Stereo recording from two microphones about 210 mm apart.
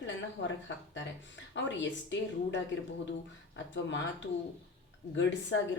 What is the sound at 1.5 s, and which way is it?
A woman's voice, 60° left (ahead or behind).